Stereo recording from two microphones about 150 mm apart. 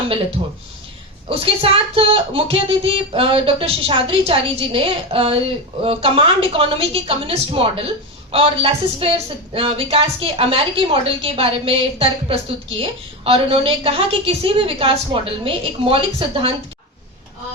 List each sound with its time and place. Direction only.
1.3 s a woman's voice: 40° right (ahead or behind)